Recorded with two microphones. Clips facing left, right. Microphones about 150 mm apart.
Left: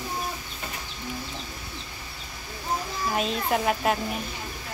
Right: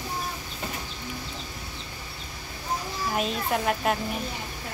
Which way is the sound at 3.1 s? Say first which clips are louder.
Left 1 dB; centre (ahead or behind).